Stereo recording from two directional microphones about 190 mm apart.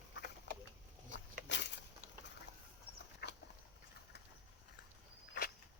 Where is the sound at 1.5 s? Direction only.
65° left (ahead or behind).